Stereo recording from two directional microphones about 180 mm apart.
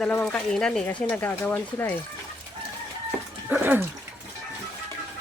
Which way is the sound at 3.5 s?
10° right (ahead or behind).